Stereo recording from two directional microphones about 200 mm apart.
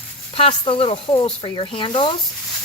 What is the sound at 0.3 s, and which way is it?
Speech, 30° left (ahead or behind).